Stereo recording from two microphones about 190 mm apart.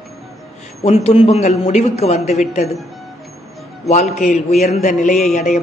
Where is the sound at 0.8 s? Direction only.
35° left (ahead or behind).